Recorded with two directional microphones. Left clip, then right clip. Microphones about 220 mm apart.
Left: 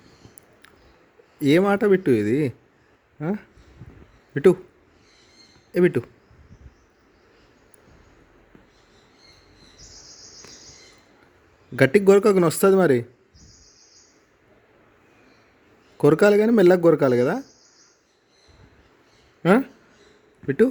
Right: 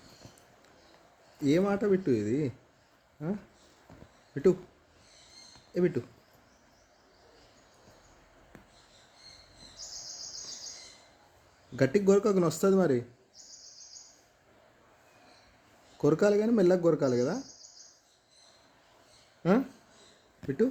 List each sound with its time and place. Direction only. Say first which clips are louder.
1.4 s speech: left 9 dB; 30° left (ahead or behind)
5.7 s speech: left 10 dB; 35° left (ahead or behind)
11.8 s speech: left 9 dB; 30° left (ahead or behind)
16.0 s speech: left 9 dB; 30° left (ahead or behind)
19.4 s speech: left 9 dB; 30° left (ahead or behind)